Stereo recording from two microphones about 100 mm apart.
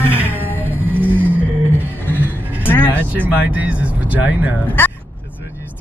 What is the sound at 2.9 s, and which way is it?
Speech, 20° right (ahead or behind).